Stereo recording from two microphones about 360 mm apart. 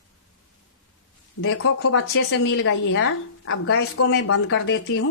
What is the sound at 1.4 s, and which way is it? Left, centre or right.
Speech, left.